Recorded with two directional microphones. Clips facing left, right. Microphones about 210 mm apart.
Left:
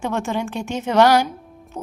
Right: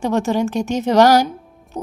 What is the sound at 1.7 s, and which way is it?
Music, 15° right (ahead or behind).